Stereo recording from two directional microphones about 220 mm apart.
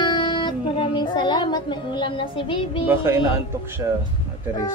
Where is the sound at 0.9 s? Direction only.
20° left (ahead or behind).